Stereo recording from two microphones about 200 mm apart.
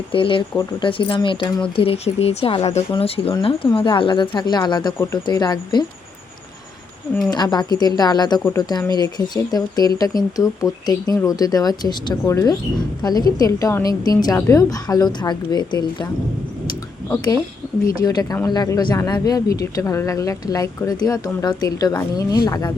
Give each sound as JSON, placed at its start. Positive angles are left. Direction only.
{"t": 0.1, "sound": "speech", "side_deg": 25}
{"t": 7.3, "sound": "speech", "side_deg": 20}
{"t": 17.1, "sound": "speech", "side_deg": 15}